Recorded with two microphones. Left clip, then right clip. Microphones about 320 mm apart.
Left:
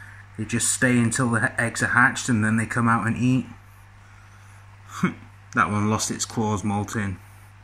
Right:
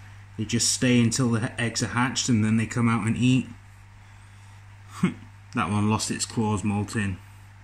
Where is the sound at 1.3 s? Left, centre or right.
Left.